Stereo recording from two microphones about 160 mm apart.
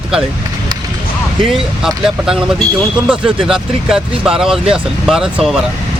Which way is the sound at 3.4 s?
5° right (ahead or behind).